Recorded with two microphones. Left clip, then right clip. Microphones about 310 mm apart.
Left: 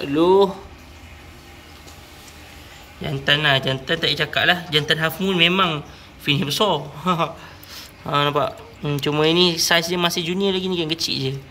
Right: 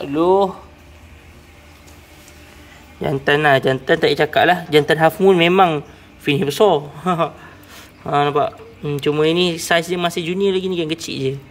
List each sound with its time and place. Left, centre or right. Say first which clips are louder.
0.0 s speech: right 1 dB; centre
3.0 s speech: right 3 dB; centre